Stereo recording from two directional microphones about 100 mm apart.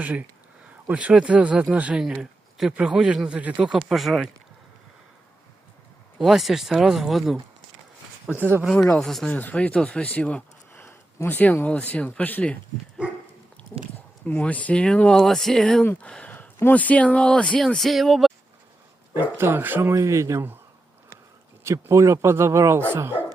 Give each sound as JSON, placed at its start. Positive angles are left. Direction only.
{"t": 0.0, "sound": "a man's voice", "side_deg": -15}
{"t": 6.1, "sound": "speech", "side_deg": -5}
{"t": 9.0, "sound": "speech", "side_deg": 5}
{"t": 9.3, "sound": "speech", "side_deg": 15}
{"t": 14.3, "sound": "speech", "side_deg": 15}
{"t": 19.1, "sound": "speech", "side_deg": -25}
{"t": 21.6, "sound": "speech", "side_deg": -30}